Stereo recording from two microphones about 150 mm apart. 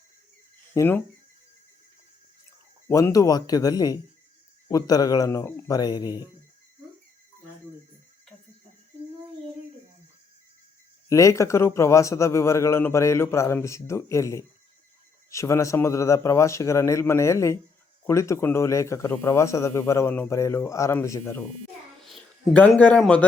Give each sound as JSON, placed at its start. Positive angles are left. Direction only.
{"t": 0.7, "sound": "speech", "side_deg": 15}
{"t": 2.9, "sound": "speech", "side_deg": 20}
{"t": 11.1, "sound": "speech", "side_deg": 20}
{"t": 22.0, "sound": "speech", "side_deg": 5}